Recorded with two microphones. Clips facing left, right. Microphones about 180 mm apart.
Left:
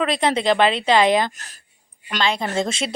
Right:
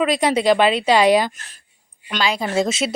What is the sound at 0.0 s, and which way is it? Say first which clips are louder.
Speech: right 3 dB; 10° right (ahead or behind).